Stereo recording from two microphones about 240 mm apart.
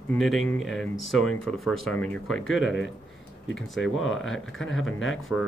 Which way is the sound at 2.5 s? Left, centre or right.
Left.